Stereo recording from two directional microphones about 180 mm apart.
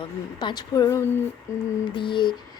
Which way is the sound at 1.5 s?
15° left (ahead or behind).